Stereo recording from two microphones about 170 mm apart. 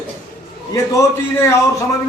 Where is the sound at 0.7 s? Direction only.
20° left (ahead or behind).